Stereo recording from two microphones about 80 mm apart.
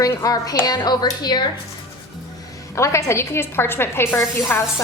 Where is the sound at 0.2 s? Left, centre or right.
Left.